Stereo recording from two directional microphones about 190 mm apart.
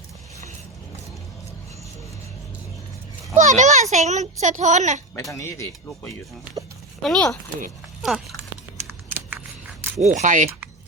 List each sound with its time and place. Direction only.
3.3 s a child's voice: 40° right (ahead or behind)
5.3 s speech: 15° left (ahead or behind)
7.0 s speech: centre (ahead or behind)
10.0 s speech: 40° right (ahead or behind)